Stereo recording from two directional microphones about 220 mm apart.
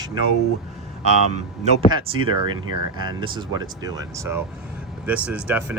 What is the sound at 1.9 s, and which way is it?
Speech, 20° right (ahead or behind).